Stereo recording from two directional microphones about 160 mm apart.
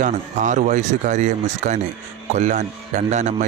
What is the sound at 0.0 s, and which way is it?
A man's voice, 50° right (ahead or behind).